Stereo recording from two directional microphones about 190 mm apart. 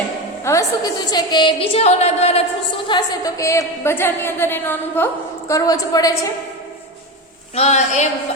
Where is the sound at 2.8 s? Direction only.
20° left (ahead or behind).